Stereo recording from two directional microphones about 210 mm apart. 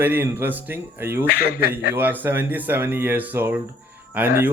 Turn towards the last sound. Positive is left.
turn(degrees=-10)  # may be behind; listen again after turning